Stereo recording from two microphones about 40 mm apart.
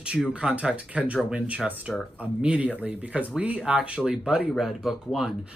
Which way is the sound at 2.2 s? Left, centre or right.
Right.